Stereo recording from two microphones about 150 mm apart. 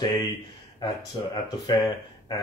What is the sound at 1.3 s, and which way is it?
Speech, 25° left (ahead or behind).